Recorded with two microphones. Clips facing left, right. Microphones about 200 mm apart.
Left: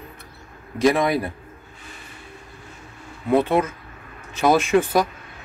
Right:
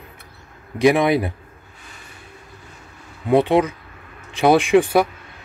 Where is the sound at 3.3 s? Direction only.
15° right (ahead or behind).